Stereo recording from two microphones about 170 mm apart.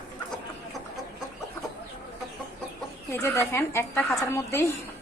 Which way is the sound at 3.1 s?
15° left (ahead or behind).